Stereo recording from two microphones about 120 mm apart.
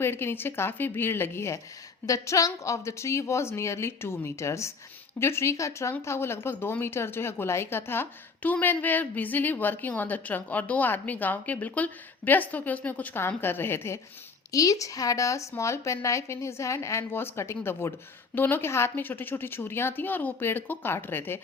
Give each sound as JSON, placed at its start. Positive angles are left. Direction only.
{"t": 0.0, "sound": "a woman's voice", "side_deg": 20}